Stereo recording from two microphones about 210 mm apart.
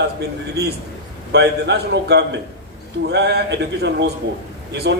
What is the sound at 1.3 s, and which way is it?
A man's voice, 55° right (ahead or behind).